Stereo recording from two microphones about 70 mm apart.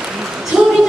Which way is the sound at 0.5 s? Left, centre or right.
Centre.